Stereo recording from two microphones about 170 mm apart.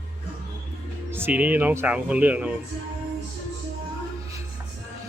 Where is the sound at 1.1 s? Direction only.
10° right (ahead or behind).